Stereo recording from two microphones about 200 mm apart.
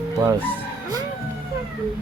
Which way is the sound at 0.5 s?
20° right (ahead or behind).